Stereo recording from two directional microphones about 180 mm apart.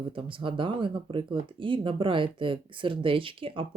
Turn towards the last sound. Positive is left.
turn(degrees=-30)  # may be behind; listen again after turning